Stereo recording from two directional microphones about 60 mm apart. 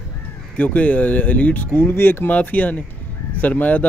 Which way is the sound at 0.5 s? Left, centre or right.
Left.